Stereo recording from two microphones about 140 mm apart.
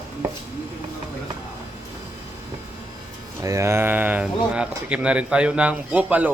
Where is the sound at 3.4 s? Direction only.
20° right (ahead or behind).